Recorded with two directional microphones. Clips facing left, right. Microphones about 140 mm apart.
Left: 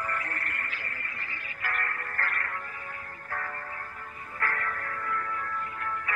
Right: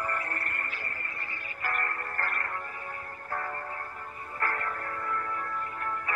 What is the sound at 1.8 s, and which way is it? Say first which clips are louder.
Music: right 1 dB; 30° right (ahead or behind).